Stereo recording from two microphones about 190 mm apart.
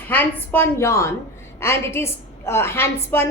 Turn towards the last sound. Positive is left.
turn(degrees=15)  # may be behind; listen again after turning